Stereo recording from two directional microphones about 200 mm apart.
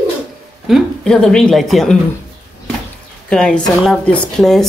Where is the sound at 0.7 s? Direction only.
Centre (ahead or behind).